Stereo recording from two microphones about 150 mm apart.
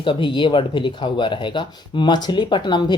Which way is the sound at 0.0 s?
35° left (ahead or behind).